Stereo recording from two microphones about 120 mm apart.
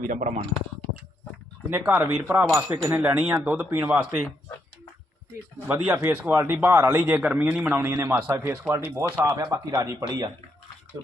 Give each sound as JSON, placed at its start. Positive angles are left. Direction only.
{"t": 0.1, "sound": "speech", "side_deg": -90}
{"t": 1.7, "sound": "a man's voice", "side_deg": -20}
{"t": 5.6, "sound": "a man's voice", "side_deg": -15}